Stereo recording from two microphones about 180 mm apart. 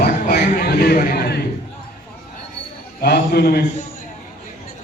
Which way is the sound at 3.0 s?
65° left (ahead or behind).